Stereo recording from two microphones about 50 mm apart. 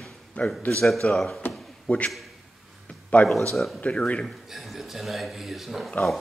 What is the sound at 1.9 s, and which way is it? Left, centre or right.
Speech, left.